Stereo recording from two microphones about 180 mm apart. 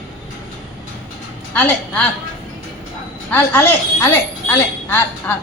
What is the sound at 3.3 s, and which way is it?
A woman's voice, 15° left (ahead or behind).